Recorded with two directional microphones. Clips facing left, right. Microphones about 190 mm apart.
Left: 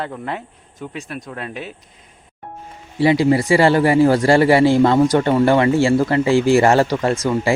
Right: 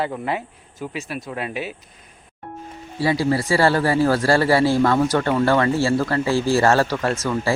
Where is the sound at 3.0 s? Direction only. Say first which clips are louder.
Left 5 dB; 20° left (ahead or behind).